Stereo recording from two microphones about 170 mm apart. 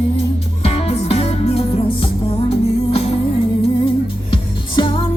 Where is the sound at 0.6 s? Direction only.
35° left (ahead or behind).